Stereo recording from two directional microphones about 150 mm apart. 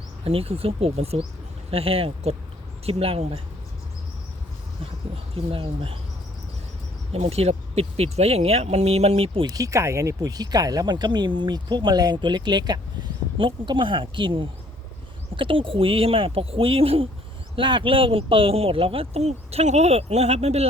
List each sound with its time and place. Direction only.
0.3 s speech: 40° right (ahead or behind)
5.1 s speech: 40° right (ahead or behind)
7.1 s speech: 45° right (ahead or behind)